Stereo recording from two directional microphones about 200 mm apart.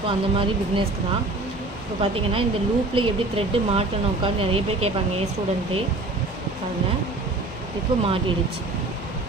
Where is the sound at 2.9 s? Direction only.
30° right (ahead or behind).